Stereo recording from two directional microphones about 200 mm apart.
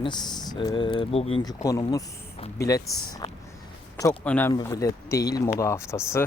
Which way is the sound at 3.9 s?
15° left (ahead or behind).